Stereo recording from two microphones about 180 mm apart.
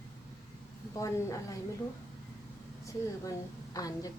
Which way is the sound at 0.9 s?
15° left (ahead or behind).